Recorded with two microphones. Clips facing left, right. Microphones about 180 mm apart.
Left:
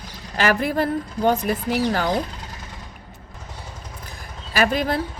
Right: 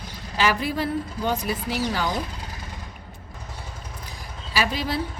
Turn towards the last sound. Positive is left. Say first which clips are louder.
# left 5 dB
turn(degrees=50)  # may be behind; listen again after turning